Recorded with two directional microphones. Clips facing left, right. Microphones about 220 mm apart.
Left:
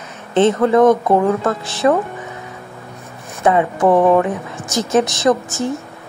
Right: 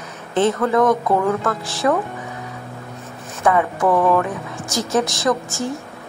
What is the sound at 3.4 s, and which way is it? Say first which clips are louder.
Speech: left 3 dB; 25° left (ahead or behind).